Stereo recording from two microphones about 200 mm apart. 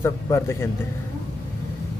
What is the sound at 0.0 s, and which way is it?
Speech, 15° left (ahead or behind).